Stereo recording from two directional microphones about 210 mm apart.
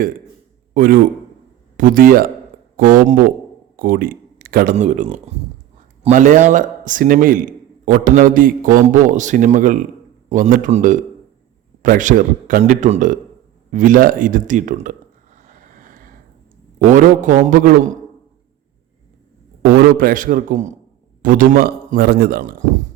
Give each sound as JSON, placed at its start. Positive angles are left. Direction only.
{"t": 0.7, "sound": "a man's voice", "side_deg": -45}
{"t": 15.4, "sound": "vehicle", "side_deg": -35}
{"t": 16.9, "sound": "a man's voice", "side_deg": -40}
{"t": 19.6, "sound": "a man's voice", "side_deg": -45}